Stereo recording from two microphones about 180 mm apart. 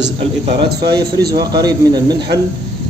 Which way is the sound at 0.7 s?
65° right (ahead or behind).